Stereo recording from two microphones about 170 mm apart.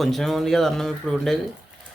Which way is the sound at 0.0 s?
Centre (ahead or behind).